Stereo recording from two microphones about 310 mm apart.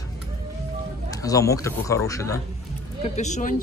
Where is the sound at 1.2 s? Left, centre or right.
Centre.